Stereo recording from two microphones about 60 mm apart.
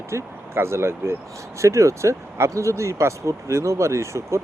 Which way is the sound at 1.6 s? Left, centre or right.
Right.